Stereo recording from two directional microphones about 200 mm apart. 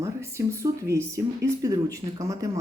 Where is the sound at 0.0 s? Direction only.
15° right (ahead or behind).